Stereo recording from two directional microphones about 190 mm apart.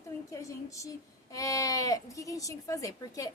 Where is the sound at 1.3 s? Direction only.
15° left (ahead or behind).